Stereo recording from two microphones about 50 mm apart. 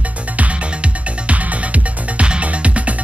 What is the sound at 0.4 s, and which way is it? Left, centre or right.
Music, right.